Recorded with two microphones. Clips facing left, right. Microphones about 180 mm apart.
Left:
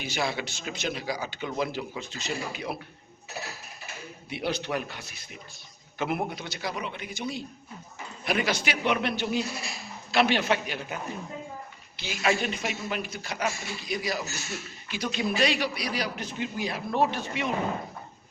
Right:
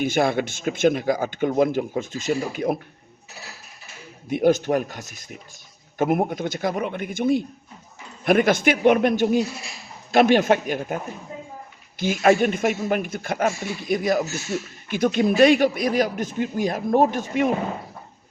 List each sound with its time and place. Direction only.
0.0 s speech: 50° right (ahead or behind)
4.3 s speech: 45° right (ahead or behind)